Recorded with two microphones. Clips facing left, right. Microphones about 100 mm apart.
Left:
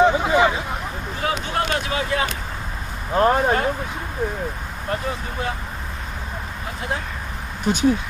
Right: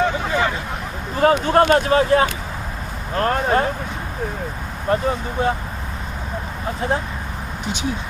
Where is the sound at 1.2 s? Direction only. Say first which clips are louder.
Right 10 dB; 45° right (ahead or behind).